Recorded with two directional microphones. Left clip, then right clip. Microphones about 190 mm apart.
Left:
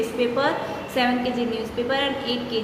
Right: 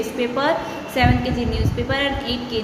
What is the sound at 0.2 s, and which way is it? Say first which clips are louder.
A woman's voice: right 3 dB; 25° right (ahead or behind).